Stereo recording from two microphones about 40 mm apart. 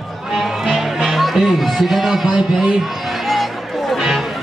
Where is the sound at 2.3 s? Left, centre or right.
Centre.